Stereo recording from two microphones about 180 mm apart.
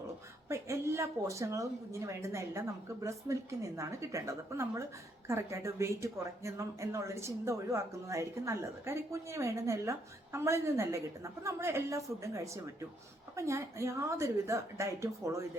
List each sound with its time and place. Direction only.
0.4 s speech: 15° right (ahead or behind)